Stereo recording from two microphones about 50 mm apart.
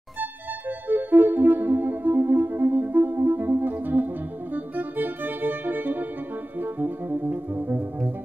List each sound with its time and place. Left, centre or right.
0.2 s music: right